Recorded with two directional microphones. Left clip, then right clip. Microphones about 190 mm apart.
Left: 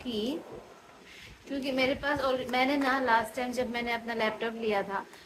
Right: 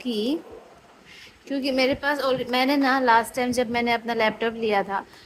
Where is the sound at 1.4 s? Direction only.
45° right (ahead or behind).